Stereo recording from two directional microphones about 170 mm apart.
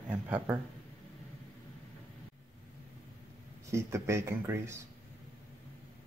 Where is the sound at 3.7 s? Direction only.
15° right (ahead or behind).